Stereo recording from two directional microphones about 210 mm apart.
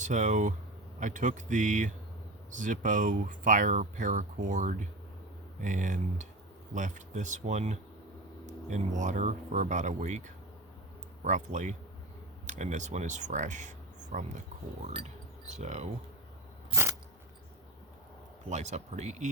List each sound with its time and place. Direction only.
0.0 s speech: 35° right (ahead or behind)
16.7 s a sound: 15° right (ahead or behind)
18.4 s speech: 35° right (ahead or behind)